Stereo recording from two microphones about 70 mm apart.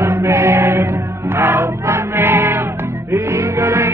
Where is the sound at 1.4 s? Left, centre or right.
Right.